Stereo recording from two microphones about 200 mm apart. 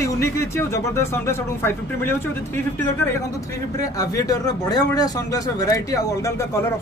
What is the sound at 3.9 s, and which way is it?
Speech, 15° left (ahead or behind).